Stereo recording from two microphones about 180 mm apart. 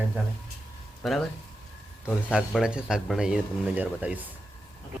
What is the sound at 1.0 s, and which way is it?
Speech, centre (ahead or behind).